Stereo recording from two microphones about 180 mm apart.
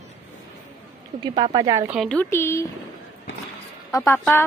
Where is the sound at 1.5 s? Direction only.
20° right (ahead or behind).